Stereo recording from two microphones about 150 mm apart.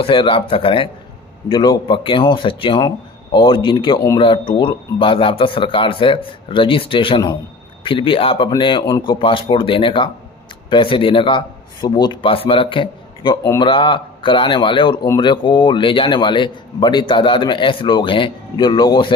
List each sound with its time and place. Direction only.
0.0 s a man's voice: 35° left (ahead or behind)
9.1 s a man's voice: 35° left (ahead or behind)